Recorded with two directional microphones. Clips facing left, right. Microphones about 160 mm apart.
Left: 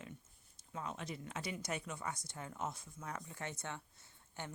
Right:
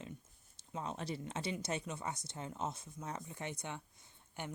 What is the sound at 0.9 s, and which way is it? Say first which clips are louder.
Speech: right 4 dB; 35° right (ahead or behind).